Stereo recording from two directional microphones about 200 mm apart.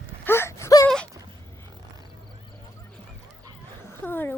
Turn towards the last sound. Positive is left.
turn(degrees=10)  # may be behind; listen again after turning